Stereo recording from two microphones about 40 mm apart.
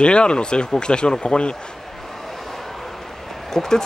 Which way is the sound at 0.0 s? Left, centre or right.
Left.